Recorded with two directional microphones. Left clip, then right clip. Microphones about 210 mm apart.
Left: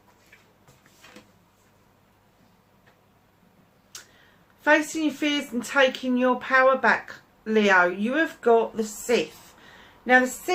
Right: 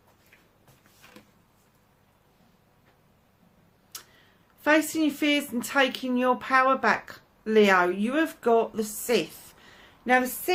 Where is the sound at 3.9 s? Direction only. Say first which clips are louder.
Left 1 dB; 50° right (ahead or behind).